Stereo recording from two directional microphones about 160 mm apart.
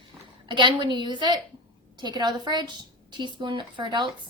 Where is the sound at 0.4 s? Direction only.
30° right (ahead or behind).